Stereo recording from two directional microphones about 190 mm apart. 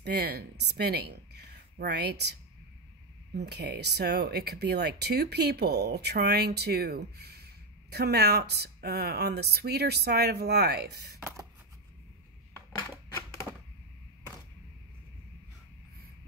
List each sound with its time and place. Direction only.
0.0 s a woman's voice: 60° right (ahead or behind)
3.3 s speech: 60° right (ahead or behind)